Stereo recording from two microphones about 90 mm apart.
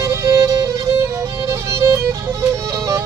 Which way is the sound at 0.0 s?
35° right (ahead or behind).